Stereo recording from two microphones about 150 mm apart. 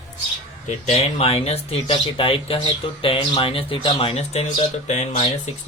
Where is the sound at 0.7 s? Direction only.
45° left (ahead or behind).